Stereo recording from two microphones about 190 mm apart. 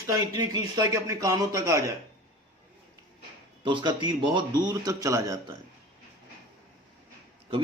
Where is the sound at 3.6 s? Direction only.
25° right (ahead or behind).